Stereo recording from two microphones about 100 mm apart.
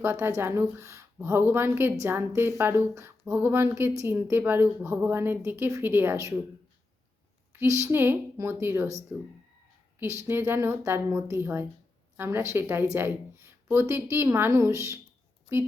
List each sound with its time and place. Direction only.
0.0 s a woman's voice: 25° right (ahead or behind)
7.6 s a woman's voice: 25° right (ahead or behind)